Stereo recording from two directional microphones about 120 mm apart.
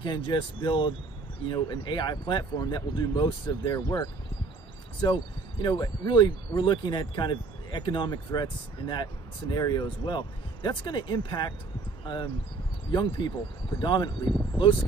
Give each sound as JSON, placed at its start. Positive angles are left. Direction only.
{"t": 0.0, "sound": "speech", "side_deg": 40}